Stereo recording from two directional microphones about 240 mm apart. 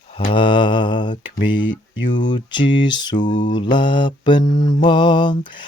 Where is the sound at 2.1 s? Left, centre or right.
Centre.